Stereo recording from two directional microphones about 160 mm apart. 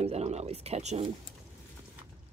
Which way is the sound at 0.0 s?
45° right (ahead or behind).